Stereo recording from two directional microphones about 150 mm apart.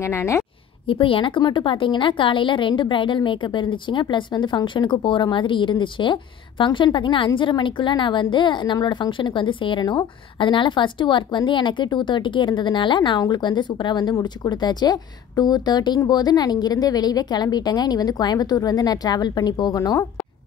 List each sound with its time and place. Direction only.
0.0 s a woman's voice: 20° left (ahead or behind)
0.8 s a woman's voice: 35° left (ahead or behind)